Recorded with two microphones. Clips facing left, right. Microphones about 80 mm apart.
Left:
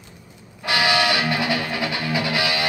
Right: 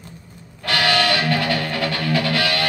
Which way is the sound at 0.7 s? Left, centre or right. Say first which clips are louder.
Right 1 dB; centre.